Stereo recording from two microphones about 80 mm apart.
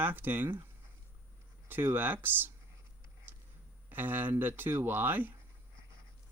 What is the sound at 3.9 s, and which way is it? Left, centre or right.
Speech, right.